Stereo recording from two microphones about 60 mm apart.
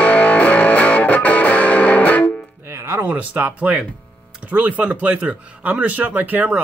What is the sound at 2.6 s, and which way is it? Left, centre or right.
Music, right.